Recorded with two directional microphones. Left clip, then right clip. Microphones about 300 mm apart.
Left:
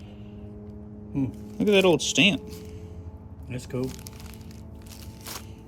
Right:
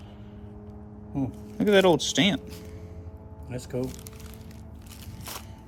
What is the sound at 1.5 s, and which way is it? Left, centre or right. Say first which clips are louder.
Speech: even; centre.